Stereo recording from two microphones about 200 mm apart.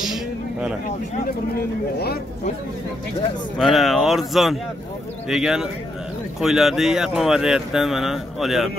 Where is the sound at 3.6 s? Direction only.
Centre (ahead or behind).